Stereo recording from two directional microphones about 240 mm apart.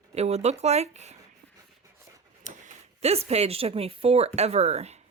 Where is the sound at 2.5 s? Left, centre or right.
Right.